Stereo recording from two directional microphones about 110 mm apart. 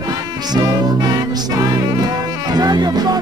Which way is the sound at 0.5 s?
40° right (ahead or behind).